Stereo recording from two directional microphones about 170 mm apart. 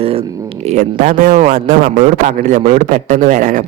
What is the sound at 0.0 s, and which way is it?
A man's voice, 35° right (ahead or behind).